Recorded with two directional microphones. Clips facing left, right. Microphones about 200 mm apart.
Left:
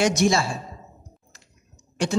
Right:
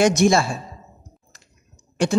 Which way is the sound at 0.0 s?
50° right (ahead or behind).